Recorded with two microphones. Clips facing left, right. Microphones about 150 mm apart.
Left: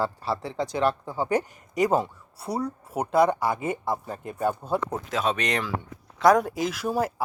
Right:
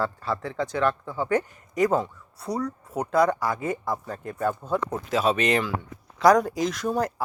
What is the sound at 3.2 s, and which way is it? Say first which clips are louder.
Speech: left 1 dB; 25° left (ahead or behind).